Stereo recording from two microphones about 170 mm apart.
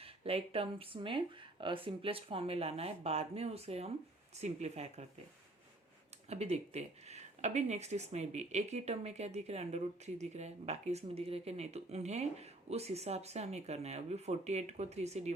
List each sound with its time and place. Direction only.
0.0 s speech: 35° right (ahead or behind)
6.2 s speech: 40° right (ahead or behind)